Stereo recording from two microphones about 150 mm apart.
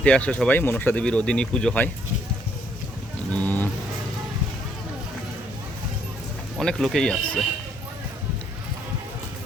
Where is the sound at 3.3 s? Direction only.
10° left (ahead or behind).